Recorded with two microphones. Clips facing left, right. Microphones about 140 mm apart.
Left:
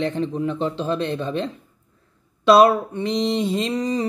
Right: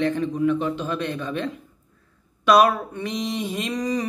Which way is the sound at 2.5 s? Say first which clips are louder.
Left 3 dB; 25° left (ahead or behind).